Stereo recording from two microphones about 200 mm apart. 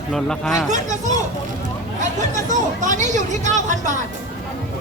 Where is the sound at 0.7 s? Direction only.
40° right (ahead or behind).